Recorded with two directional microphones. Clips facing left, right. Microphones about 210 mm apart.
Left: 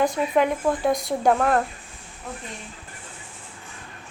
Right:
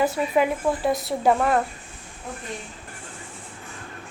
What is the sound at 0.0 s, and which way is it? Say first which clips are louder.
A woman's voice: even; 5° right (ahead or behind).